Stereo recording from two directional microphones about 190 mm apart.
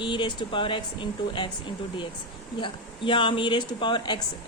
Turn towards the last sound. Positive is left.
turn(degrees=25)  # may be behind; listen again after turning